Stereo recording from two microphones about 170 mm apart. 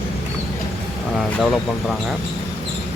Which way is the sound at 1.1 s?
Centre (ahead or behind).